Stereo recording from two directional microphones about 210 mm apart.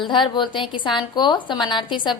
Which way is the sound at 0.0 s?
20° left (ahead or behind).